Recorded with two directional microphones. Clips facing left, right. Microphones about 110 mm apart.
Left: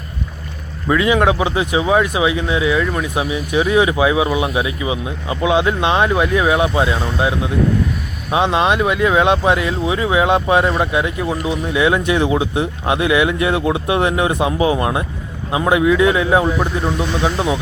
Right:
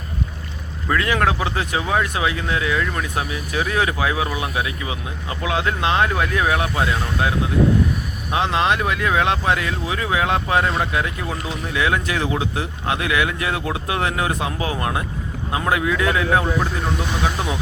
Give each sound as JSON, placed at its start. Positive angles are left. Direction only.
{"t": 0.9, "sound": "speech", "side_deg": 15}